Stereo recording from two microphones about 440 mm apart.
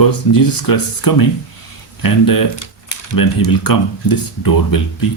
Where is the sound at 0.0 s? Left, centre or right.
Left.